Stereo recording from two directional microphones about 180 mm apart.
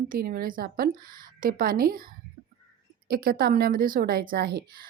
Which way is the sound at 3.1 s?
55° right (ahead or behind).